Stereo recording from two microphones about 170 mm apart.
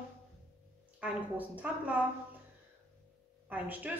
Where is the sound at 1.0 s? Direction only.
10° right (ahead or behind).